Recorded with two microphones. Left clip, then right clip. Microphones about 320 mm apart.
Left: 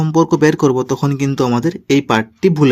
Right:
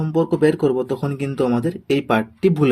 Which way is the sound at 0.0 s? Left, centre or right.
Left.